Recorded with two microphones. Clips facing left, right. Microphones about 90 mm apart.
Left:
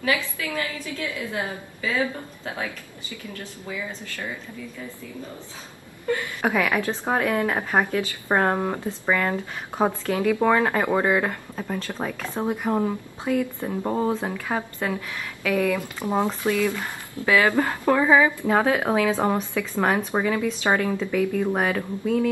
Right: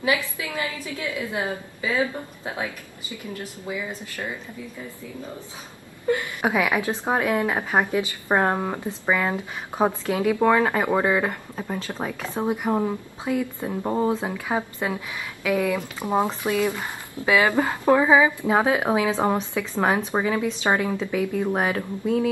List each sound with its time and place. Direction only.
0.0 s a woman's voice: 20° right (ahead or behind)
6.0 s speech: 15° right (ahead or behind)